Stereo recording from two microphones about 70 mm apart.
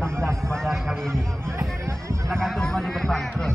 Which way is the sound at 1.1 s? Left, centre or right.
Right.